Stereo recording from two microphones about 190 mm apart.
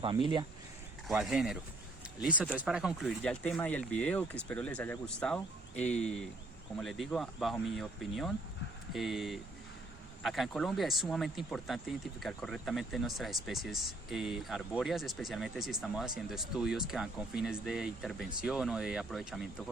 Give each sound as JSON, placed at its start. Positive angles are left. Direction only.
{"t": 0.0, "sound": "speech", "side_deg": -25}
{"t": 1.0, "sound": "speech", "side_deg": 0}